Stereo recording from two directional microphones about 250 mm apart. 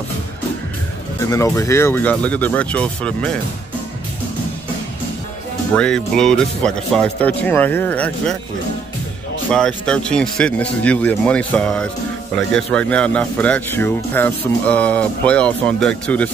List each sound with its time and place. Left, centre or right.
1.2 s speech: centre
5.8 s speech: centre
9.5 s speech: centre